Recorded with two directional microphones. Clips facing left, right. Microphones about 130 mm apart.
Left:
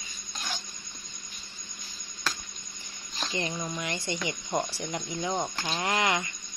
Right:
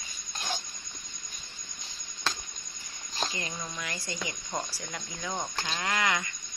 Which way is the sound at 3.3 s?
25° left (ahead or behind).